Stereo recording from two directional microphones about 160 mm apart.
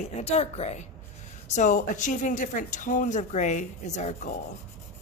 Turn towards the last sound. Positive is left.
turn(degrees=50)  # may be behind; listen again after turning